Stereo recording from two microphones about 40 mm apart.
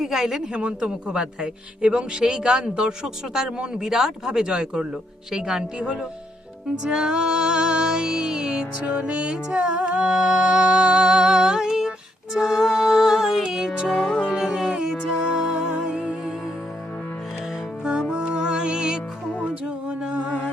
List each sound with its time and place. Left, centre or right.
0.0 s speech: centre
0.5 s a man's voice: right
6.8 s music: right
8.9 s a man's voice: right
9.6 s music: right
13.9 s music: left
14.3 s music: centre
18.1 s music: right
19.5 s music: right